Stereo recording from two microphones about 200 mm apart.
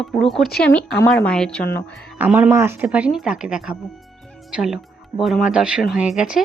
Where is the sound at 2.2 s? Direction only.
5° right (ahead or behind).